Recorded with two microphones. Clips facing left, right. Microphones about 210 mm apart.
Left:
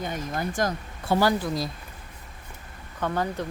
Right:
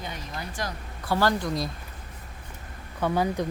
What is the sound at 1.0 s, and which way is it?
Speech, 20° left (ahead or behind).